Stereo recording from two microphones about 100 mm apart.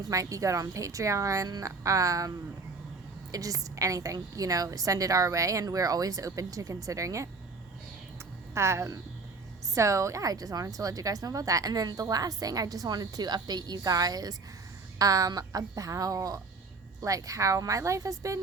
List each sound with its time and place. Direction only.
0.0 s a woman's voice: 35° right (ahead or behind)
3.3 s a woman's voice: 35° right (ahead or behind)
8.5 s a woman's voice: 30° right (ahead or behind)